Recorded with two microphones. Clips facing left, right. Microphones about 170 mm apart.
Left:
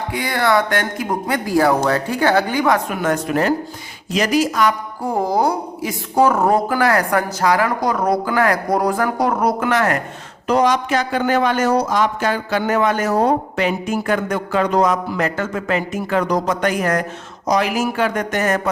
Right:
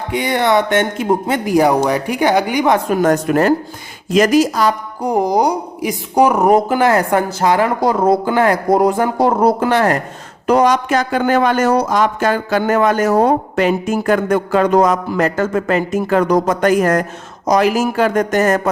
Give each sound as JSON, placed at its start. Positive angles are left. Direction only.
{"t": 0.1, "sound": "a woman's voice", "side_deg": -20}
{"t": 2.9, "sound": "speech", "side_deg": -40}
{"t": 5.0, "sound": "a woman's voice", "side_deg": -15}
{"t": 10.4, "sound": "speech", "side_deg": -50}